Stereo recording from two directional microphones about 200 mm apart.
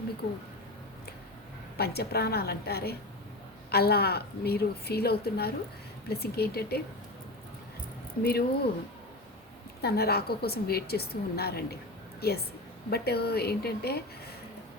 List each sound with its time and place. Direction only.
1.7 s a woman's voice: 50° left (ahead or behind)
8.2 s a woman's voice: 50° left (ahead or behind)
9.8 s a woman's voice: 50° left (ahead or behind)